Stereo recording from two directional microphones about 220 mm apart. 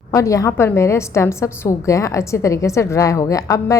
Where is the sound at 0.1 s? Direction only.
15° left (ahead or behind).